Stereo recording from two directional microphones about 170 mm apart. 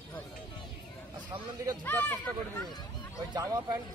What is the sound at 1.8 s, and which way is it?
Speech, 10° left (ahead or behind).